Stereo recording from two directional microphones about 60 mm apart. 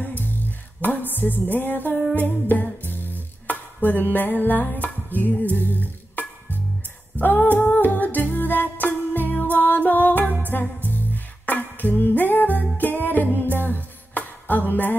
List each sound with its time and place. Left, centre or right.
0.2 s music: left
7.2 s humming: left
7.9 s music: left
11.4 s music: left